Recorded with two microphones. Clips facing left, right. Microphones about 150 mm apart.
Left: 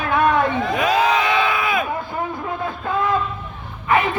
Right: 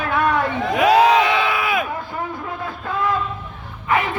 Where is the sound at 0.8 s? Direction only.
75° right (ahead or behind).